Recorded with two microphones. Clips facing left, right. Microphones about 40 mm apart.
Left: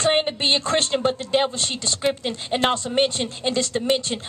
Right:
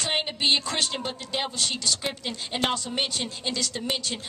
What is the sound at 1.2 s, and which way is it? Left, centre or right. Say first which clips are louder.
A woman's voice: left 7 dB; left.